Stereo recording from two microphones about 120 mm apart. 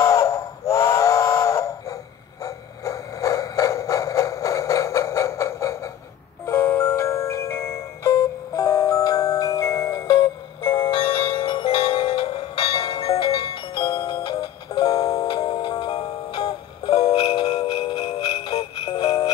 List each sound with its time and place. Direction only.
0.0 s steam whistle: 25° left (ahead or behind)
2.4 s a sound: 25° left (ahead or behind)
6.4 s music: 20° left (ahead or behind); by 18.1 s 40° left (ahead or behind)
18.2 s jingle bell: 35° left (ahead or behind)
18.9 s music: 35° left (ahead or behind)